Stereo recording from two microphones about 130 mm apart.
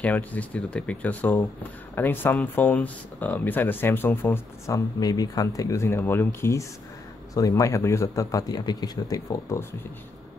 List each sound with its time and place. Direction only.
0.0 s speech: 10° left (ahead or behind)